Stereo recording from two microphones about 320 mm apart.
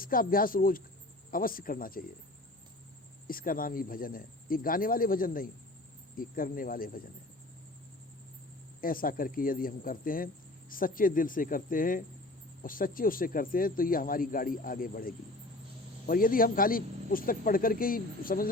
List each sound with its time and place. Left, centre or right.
0.0 s speech: left
3.2 s speech: left
8.8 s speech: left